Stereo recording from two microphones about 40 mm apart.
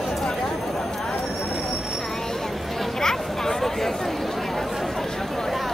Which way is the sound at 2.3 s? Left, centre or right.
Centre.